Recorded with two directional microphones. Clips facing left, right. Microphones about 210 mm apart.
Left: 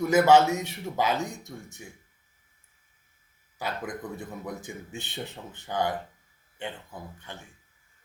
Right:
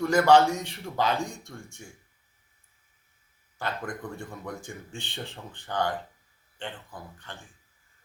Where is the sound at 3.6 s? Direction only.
5° left (ahead or behind).